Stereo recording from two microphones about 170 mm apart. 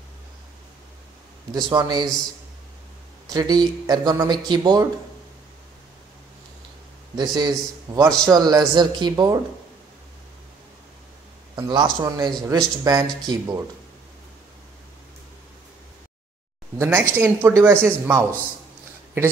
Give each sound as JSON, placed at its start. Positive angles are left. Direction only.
{"t": 1.5, "sound": "speech", "side_deg": -25}
{"t": 3.3, "sound": "speech", "side_deg": -25}
{"t": 7.2, "sound": "speech", "side_deg": -25}
{"t": 11.5, "sound": "a man's voice", "side_deg": -25}
{"t": 16.7, "sound": "speech", "side_deg": -15}